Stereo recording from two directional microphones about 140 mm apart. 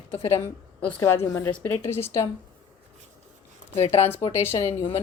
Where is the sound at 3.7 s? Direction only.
45° left (ahead or behind).